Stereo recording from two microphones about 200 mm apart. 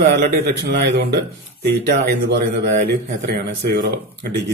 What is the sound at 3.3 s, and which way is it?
A man's voice, 55° right (ahead or behind).